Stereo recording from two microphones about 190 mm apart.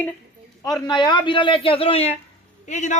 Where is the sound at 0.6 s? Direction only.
20° left (ahead or behind); by 3.0 s 40° left (ahead or behind).